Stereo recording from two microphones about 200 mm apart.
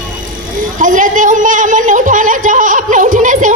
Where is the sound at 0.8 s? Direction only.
40° right (ahead or behind).